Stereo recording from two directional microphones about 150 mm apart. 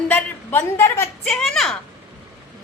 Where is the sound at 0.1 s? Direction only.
15° left (ahead or behind).